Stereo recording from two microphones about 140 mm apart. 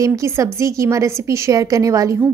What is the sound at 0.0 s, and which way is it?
A woman's voice, 20° right (ahead or behind).